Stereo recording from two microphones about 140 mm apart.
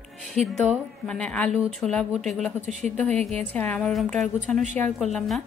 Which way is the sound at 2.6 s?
55° right (ahead or behind).